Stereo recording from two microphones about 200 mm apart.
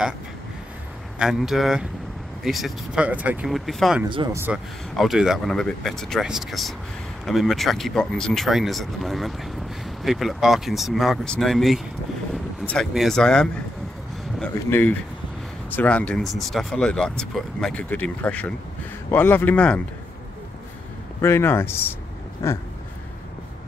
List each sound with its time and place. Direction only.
1.2 s speech: centre (ahead or behind)
4.1 s speech: 25° right (ahead or behind)
4.4 s speech: 5° right (ahead or behind)
21.2 s speech: 10° left (ahead or behind)